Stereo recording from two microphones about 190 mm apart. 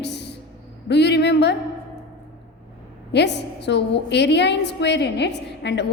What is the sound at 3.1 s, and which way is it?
A woman's voice, 65° left (ahead or behind).